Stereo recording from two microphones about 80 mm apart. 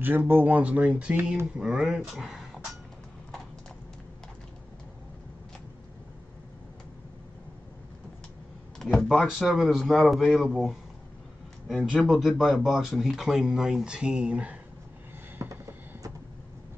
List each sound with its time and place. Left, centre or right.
0.0 s speech: right; by 2.4 s centre
8.7 s speech: centre
15.4 s a sound: right